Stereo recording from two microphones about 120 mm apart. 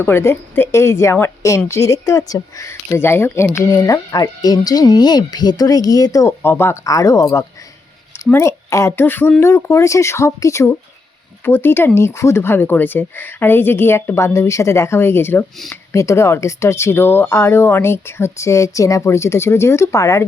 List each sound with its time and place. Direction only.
0.0 s a woman's voice: 20° left (ahead or behind)
6.4 s a woman's voice: 20° left (ahead or behind)